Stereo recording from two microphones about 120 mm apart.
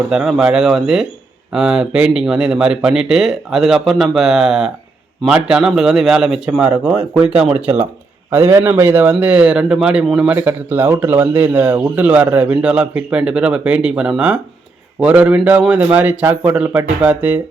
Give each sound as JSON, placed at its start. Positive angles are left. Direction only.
{"t": 0.1, "sound": "speech", "side_deg": -5}
{"t": 7.6, "sound": "a man's voice", "side_deg": -20}